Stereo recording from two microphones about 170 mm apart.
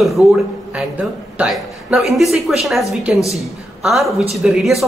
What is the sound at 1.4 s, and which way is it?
A woman's voice, 5° right (ahead or behind).